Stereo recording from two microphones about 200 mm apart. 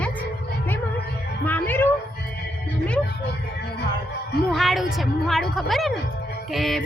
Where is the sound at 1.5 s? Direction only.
10° left (ahead or behind).